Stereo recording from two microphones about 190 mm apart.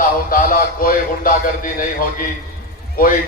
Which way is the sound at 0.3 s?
50° left (ahead or behind).